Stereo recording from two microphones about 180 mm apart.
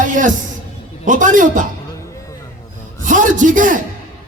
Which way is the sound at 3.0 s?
45° right (ahead or behind).